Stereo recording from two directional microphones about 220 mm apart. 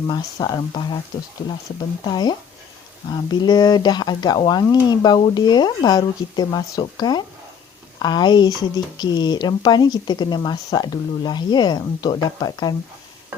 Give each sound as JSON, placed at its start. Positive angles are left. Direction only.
{"t": 0.1, "sound": "speech", "side_deg": 20}
{"t": 2.0, "sound": "speech", "side_deg": 20}